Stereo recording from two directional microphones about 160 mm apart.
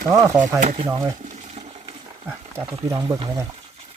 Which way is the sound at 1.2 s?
45° right (ahead or behind).